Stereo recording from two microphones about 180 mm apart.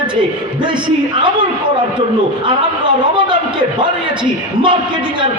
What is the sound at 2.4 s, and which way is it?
A man's voice, 25° right (ahead or behind).